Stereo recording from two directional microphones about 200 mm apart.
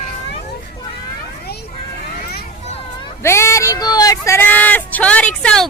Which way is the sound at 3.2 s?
15° left (ahead or behind).